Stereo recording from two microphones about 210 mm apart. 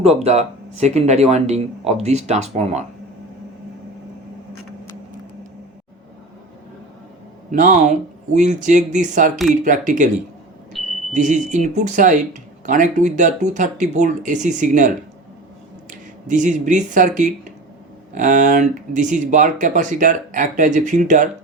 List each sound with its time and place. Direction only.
0.0 s speech: 30° right (ahead or behind)
7.5 s speech: 40° right (ahead or behind)
10.8 s smoke detector: centre (ahead or behind)
11.1 s speech: 35° right (ahead or behind)